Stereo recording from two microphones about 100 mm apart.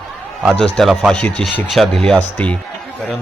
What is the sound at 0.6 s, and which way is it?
Speech, 5° left (ahead or behind).